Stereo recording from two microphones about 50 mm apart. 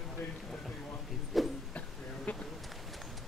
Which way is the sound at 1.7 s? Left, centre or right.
Left.